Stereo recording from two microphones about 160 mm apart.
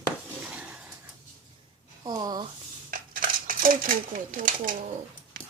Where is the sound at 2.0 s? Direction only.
25° right (ahead or behind).